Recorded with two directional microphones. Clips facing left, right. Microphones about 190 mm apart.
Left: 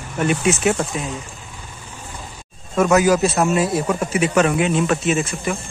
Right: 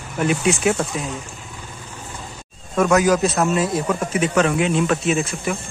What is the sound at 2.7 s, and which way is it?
A man's voice, 5° left (ahead or behind).